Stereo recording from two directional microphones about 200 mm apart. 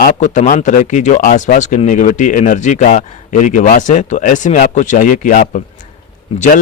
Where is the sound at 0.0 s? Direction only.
40° left (ahead or behind).